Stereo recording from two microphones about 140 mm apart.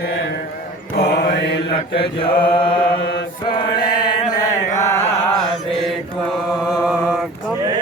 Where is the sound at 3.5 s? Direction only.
30° left (ahead or behind).